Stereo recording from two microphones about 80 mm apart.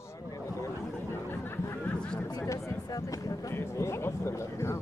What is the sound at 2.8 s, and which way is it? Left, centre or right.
Speech, left.